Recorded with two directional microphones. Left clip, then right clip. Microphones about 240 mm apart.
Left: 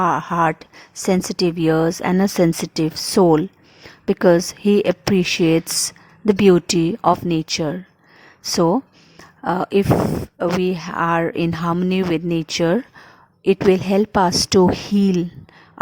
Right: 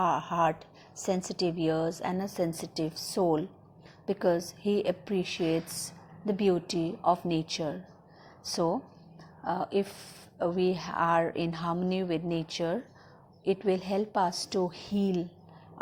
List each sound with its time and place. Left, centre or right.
0.1 s speech: left
1.0 s speech: left